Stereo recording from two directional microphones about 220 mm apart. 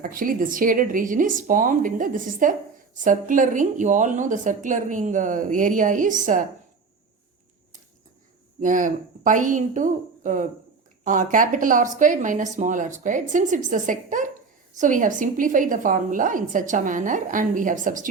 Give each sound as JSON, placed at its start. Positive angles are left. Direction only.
{"t": 0.0, "sound": "speech", "side_deg": -40}
{"t": 8.6, "sound": "speech", "side_deg": -35}